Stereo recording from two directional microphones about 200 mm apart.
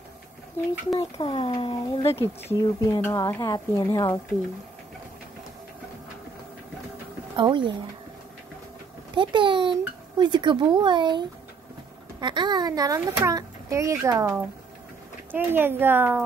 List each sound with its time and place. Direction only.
0.9 s speech: 25° left (ahead or behind)
7.3 s speech: 25° right (ahead or behind)
9.1 s a child's voice: 25° right (ahead or behind)